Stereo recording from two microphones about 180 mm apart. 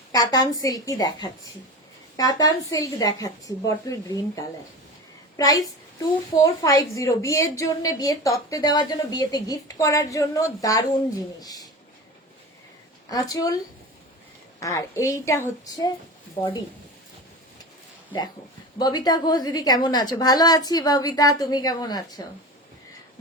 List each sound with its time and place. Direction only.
0.1 s a woman's voice: 20° left (ahead or behind)
13.1 s a woman's voice: 20° left (ahead or behind)
14.6 s a woman's voice: 15° left (ahead or behind)
18.8 s a woman's voice: 20° left (ahead or behind)